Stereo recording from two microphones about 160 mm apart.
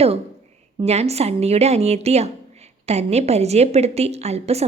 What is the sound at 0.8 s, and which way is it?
A woman's voice, 40° right (ahead or behind).